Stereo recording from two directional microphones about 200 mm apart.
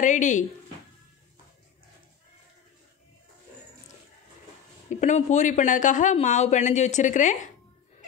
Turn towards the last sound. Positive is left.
turn(degrees=40)  # may be behind; listen again after turning